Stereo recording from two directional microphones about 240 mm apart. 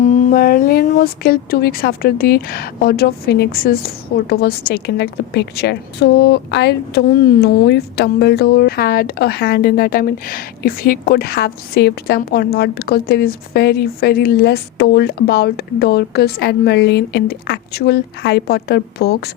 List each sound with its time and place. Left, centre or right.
0.0 s speech: left